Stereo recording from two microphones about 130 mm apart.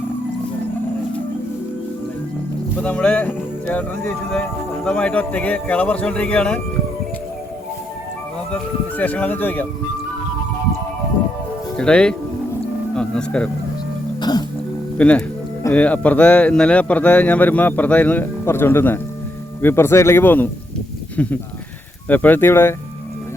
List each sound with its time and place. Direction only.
2.8 s speech: 10° left (ahead or behind)
8.5 s speech: 10° left (ahead or behind)
11.8 s speech: 5° left (ahead or behind)
14.2 s music: 30° left (ahead or behind)
14.9 s speech: 10° left (ahead or behind)